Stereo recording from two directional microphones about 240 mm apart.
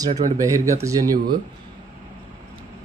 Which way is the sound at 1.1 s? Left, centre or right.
Right.